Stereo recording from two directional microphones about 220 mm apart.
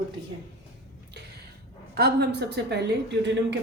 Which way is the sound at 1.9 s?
45° right (ahead or behind).